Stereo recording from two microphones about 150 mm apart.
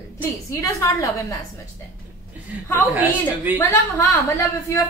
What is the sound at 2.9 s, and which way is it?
Speech, 10° right (ahead or behind).